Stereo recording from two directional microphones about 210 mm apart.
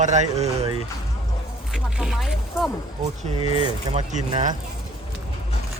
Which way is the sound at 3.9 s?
30° right (ahead or behind).